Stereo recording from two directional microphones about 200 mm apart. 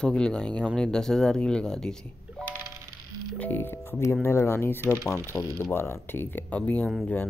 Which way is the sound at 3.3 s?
10° left (ahead or behind).